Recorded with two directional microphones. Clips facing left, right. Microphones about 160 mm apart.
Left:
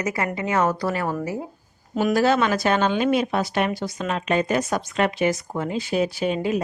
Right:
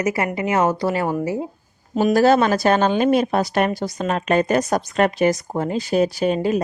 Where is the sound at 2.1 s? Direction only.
40° right (ahead or behind).